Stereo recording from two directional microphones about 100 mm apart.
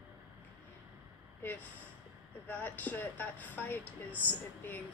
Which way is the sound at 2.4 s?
15° left (ahead or behind).